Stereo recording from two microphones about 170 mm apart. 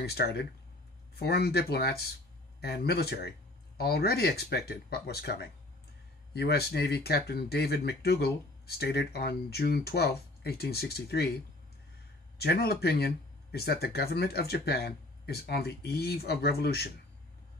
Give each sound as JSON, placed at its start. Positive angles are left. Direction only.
{"t": 0.0, "sound": "speech", "side_deg": 70}
{"t": 12.4, "sound": "speech", "side_deg": 70}